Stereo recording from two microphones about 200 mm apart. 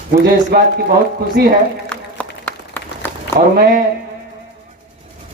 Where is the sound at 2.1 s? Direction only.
10° left (ahead or behind).